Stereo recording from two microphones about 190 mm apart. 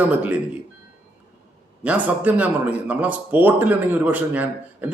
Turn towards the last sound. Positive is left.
turn(degrees=-10)  # may be behind; listen again after turning